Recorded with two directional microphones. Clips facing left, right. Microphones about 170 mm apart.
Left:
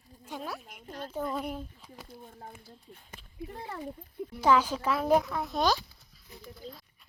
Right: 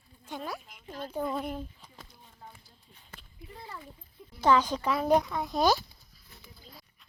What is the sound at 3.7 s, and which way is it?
Speech, 70° left (ahead or behind).